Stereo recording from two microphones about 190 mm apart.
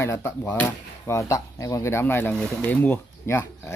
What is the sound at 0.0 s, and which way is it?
Speech, 15° left (ahead or behind).